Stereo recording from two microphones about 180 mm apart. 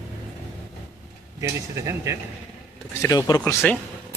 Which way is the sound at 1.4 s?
15° right (ahead or behind).